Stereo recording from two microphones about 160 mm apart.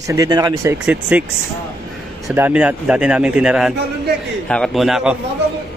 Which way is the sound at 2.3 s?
10° right (ahead or behind).